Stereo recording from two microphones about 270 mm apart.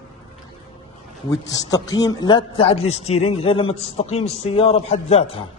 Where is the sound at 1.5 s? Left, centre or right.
Centre.